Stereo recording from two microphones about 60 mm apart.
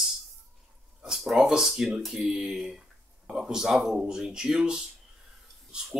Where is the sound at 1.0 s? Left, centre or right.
Centre.